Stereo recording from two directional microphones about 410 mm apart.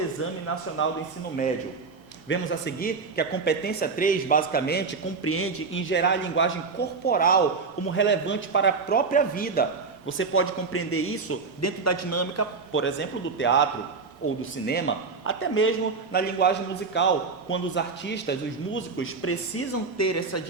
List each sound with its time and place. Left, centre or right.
0.2 s a man's voice: left
2.3 s a man's voice: left